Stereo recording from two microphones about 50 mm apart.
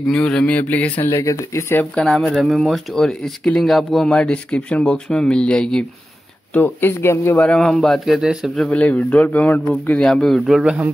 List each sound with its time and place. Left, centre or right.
0.1 s a man's voice: centre
0.5 s speech: left
1.0 s speech: left
2.0 s a man's voice: centre
2.3 s speech: centre
3.1 s a man's voice: centre
4.1 s speech: left
6.8 s speech: left
7.3 s a man's voice: centre
8.0 s speech: centre
8.6 s speech: left
9.9 s a man's voice: centre